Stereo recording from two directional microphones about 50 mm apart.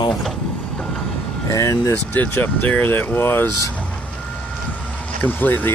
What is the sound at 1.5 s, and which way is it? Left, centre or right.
Speech, left.